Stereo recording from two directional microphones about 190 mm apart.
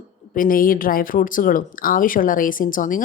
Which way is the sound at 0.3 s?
45° left (ahead or behind).